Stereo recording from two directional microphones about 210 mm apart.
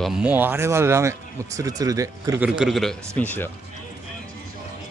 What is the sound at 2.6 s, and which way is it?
Speech, centre (ahead or behind).